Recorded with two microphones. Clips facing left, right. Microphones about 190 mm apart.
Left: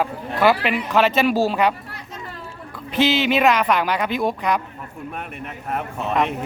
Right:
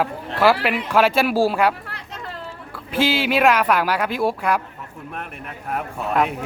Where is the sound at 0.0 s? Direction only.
5° right (ahead or behind).